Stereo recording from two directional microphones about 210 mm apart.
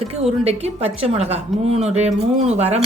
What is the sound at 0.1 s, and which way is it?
A woman's voice, 30° right (ahead or behind).